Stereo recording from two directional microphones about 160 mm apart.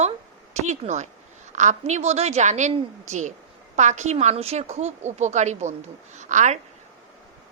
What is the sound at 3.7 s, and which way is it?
A woman's voice, 45° right (ahead or behind).